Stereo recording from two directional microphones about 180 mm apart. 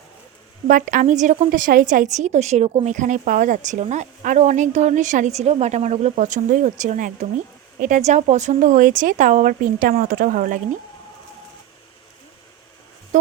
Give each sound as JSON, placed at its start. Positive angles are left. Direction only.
{"t": 0.7, "sound": "a woman's voice", "side_deg": -50}